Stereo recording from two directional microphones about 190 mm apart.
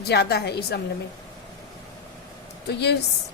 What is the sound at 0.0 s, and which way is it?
Speech, 60° left (ahead or behind).